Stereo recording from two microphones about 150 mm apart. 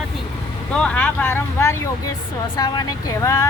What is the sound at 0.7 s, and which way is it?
Speech, 5° left (ahead or behind).